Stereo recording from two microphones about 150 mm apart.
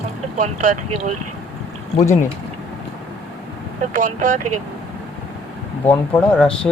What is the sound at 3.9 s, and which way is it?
Speech, 60° right (ahead or behind).